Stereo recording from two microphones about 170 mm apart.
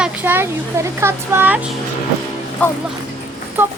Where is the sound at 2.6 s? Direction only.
10° left (ahead or behind).